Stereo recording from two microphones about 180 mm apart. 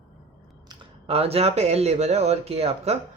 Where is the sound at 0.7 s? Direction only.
30° right (ahead or behind).